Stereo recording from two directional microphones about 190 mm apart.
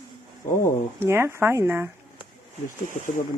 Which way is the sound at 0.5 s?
15° left (ahead or behind).